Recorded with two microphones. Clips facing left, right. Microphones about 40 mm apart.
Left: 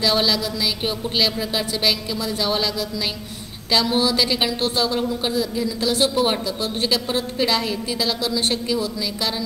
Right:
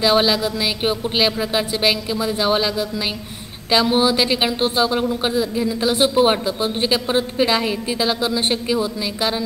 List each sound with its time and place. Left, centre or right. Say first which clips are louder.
0.0 s a woman's voice: right 4 dB; right